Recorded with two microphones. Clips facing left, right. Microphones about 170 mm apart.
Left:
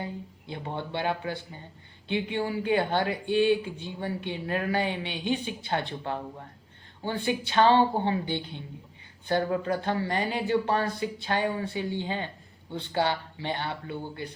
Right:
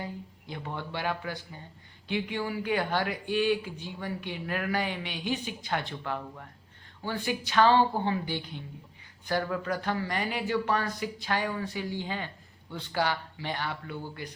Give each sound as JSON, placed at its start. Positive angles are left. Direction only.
{"t": 0.0, "sound": "speech", "side_deg": 25}